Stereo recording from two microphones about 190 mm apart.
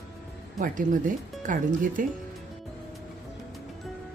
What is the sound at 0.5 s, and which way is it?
Speech, 45° right (ahead or behind).